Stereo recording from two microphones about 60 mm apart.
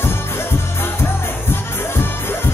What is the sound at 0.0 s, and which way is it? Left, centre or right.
Music, left.